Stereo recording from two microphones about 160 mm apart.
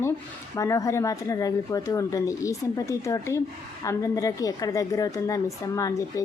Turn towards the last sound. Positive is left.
turn(degrees=20)  # may be behind; listen again after turning